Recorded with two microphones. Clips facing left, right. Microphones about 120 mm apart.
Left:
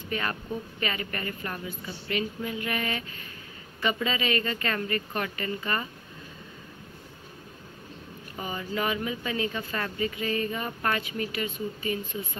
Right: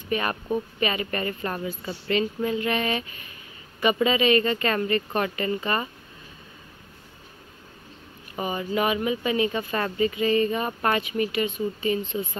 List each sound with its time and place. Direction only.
0.1 s speech: 20° right (ahead or behind)
8.4 s speech: 20° right (ahead or behind)